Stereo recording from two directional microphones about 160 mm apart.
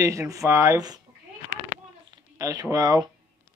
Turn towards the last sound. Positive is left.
turn(degrees=-25)  # may be behind; listen again after turning